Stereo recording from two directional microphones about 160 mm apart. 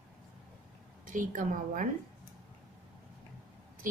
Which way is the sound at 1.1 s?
55° right (ahead or behind).